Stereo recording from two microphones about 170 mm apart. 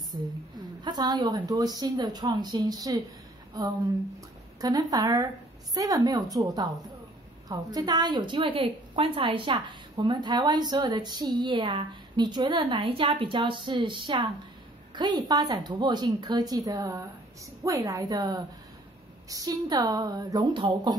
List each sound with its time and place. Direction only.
0.1 s a woman's voice: 25° right (ahead or behind)
4.6 s a woman's voice: 20° right (ahead or behind)